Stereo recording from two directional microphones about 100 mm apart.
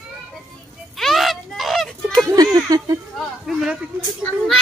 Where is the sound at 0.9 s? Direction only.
Centre (ahead or behind).